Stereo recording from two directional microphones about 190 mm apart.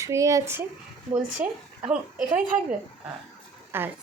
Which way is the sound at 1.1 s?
40° right (ahead or behind).